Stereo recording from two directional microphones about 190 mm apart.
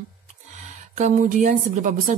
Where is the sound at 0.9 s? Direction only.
40° right (ahead or behind).